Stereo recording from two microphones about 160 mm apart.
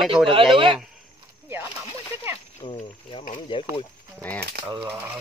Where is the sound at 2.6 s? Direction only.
40° left (ahead or behind).